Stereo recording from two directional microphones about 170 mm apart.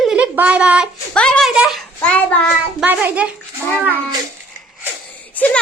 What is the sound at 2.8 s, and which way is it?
Speech, 10° right (ahead or behind).